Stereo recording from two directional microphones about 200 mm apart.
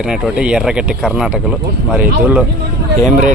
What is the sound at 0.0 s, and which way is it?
Speech, 5° right (ahead or behind).